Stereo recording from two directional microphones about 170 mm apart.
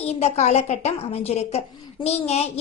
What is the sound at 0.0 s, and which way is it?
A woman's voice, 40° left (ahead or behind).